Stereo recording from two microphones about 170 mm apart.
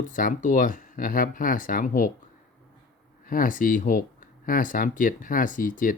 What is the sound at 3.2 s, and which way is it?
Speech, 55° left (ahead or behind).